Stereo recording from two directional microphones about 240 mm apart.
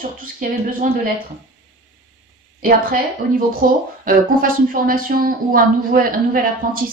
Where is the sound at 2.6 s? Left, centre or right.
Right.